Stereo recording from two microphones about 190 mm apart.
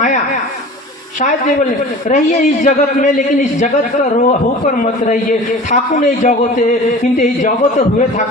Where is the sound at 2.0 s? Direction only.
40° left (ahead or behind).